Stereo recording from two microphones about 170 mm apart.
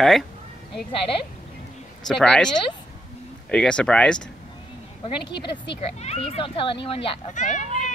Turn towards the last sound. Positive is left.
turn(degrees=45)  # may be behind; listen again after turning